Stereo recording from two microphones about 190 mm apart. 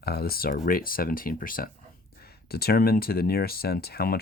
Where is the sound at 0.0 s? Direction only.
55° left (ahead or behind).